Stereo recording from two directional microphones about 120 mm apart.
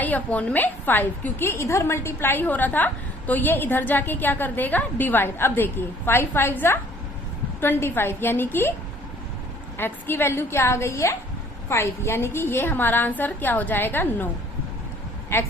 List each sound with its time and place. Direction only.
0.0 s a woman's voice: 15° left (ahead or behind)
9.7 s a woman's voice: 20° left (ahead or behind)
15.3 s a woman's voice: 20° left (ahead or behind)